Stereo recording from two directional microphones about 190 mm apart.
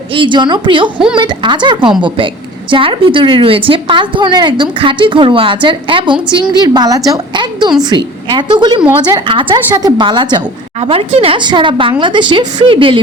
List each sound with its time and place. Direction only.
0.1 s a woman's voice: 25° right (ahead or behind)